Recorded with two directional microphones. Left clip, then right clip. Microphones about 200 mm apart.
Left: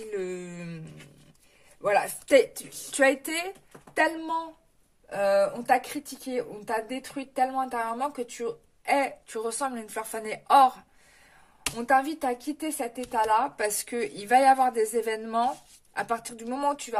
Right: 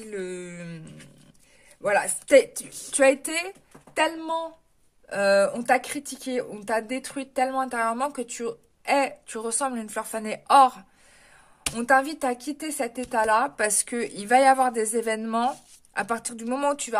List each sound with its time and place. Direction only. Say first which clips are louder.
0.1 s a sound: right 1 dB; 20° right (ahead or behind)
1.8 s speech: right 1 dB; 20° right (ahead or behind)
5.1 s speech: right 3 dB; 35° right (ahead or behind)